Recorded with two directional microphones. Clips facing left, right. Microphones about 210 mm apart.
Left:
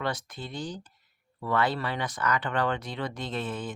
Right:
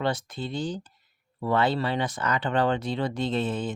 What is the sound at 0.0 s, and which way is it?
Speech, 25° right (ahead or behind).